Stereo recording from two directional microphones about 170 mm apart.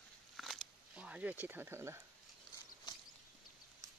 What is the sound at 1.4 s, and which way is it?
Speech, 10° right (ahead or behind).